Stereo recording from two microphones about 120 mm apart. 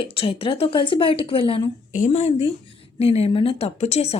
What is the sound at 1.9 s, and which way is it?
Speech, 75° left (ahead or behind).